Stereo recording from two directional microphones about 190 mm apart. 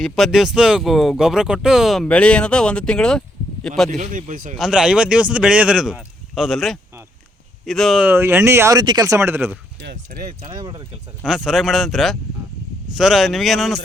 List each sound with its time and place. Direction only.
0.0 s speech: centre (ahead or behind)
3.8 s speech: 45° right (ahead or behind)
4.5 s speech: 5° right (ahead or behind)
9.8 s speech: 65° right (ahead or behind)
10.4 s speech: 25° right (ahead or behind)
11.3 s speech: centre (ahead or behind)